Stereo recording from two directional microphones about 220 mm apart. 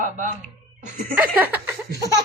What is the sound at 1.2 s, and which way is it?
Speech, 10° right (ahead or behind).